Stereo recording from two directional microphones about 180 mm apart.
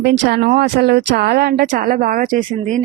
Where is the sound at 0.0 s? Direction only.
65° right (ahead or behind).